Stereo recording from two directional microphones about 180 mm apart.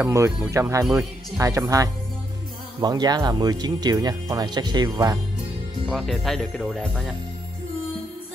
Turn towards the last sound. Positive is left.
turn(degrees=0)  # may be behind; listen again after turning